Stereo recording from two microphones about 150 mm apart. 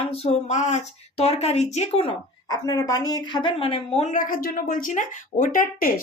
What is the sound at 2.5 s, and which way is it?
Speech, 25° left (ahead or behind).